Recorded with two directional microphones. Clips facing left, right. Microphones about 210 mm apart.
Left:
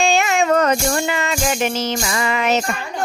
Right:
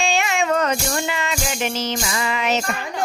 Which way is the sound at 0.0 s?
45° left (ahead or behind).